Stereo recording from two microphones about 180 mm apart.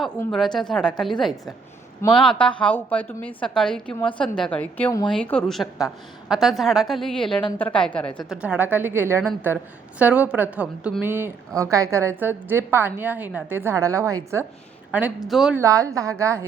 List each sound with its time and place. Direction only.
0.3 s a woman's voice: centre (ahead or behind); by 14.4 s 15° right (ahead or behind)
15.3 s a woman's voice: centre (ahead or behind)
15.5 s a woman's voice: 15° right (ahead or behind)